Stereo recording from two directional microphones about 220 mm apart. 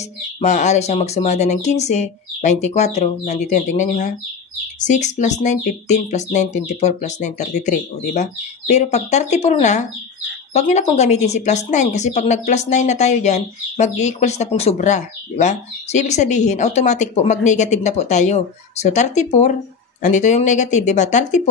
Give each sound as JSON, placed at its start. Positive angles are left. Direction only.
{"t": 0.4, "sound": "speech", "side_deg": 30}